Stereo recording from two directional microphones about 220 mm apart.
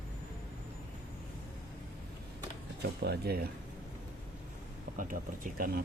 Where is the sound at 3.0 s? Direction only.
45° right (ahead or behind).